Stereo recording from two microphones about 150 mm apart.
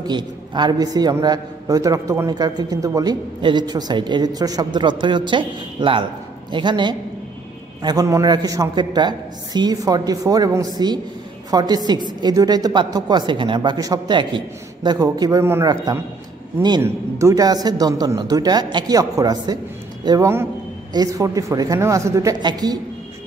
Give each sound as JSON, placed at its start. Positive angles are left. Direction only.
{"t": 0.0, "sound": "a man's voice", "side_deg": -30}